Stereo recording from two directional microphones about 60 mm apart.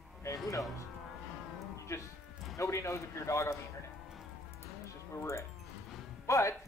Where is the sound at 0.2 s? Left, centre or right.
Left.